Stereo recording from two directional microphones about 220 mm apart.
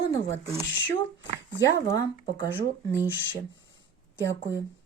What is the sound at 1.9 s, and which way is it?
Speech, 15° left (ahead or behind).